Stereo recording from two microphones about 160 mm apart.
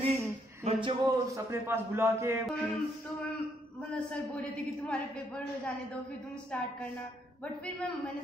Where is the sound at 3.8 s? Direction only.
5° left (ahead or behind).